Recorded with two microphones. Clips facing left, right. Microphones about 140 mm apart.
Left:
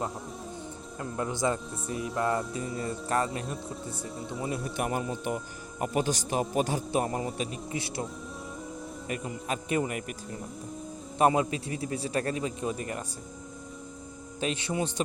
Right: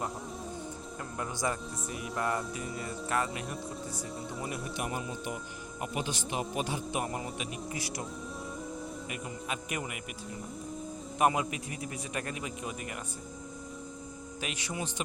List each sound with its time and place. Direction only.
1.4 s music: 25° left (ahead or behind)
3.1 s a man's voice: 35° left (ahead or behind)
4.2 s speech: centre (ahead or behind)
4.8 s a man's voice: 50° left (ahead or behind); by 7.3 s 35° left (ahead or behind)
7.3 s music: 25° left (ahead or behind)
9.0 s a man's voice: 35° left (ahead or behind)
11.2 s a man's voice: 30° left (ahead or behind)
14.4 s music: 30° left (ahead or behind)